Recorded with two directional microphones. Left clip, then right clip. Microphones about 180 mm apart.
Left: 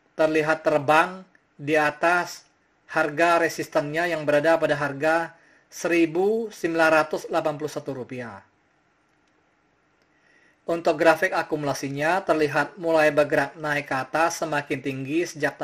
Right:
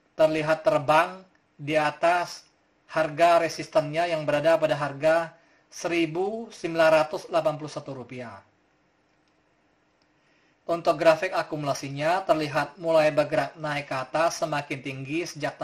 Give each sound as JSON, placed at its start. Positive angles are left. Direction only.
{"t": 0.1, "sound": "a man's voice", "side_deg": 30}
{"t": 10.6, "sound": "speech", "side_deg": 30}